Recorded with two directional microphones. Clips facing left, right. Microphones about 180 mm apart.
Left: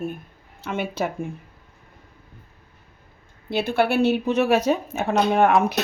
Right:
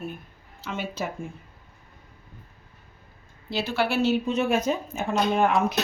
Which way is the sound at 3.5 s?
55° left (ahead or behind).